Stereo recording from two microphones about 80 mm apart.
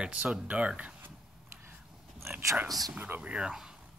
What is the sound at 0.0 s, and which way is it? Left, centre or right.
Speech, centre.